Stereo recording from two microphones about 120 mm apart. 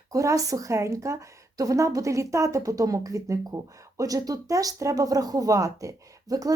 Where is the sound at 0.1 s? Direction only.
30° right (ahead or behind).